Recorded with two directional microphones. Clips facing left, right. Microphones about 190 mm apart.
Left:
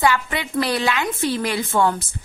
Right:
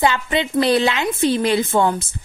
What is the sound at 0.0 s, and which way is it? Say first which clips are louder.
A woman's voice: right 2 dB; 25° right (ahead or behind).